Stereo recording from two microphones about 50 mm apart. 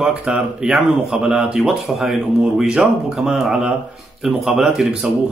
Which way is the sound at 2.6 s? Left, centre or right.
Centre.